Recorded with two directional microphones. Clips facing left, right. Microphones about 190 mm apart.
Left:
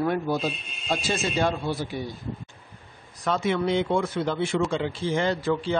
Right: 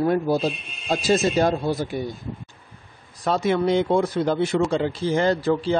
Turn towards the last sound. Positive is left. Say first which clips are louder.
# right 4 dB
turn(degrees=-35)  # may be behind; listen again after turning